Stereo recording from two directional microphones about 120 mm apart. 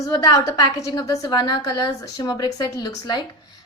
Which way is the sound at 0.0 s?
30° left (ahead or behind).